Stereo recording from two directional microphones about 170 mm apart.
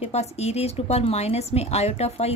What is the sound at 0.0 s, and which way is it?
Speech, 40° left (ahead or behind).